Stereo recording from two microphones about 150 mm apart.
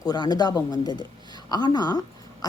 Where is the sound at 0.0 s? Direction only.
25° left (ahead or behind).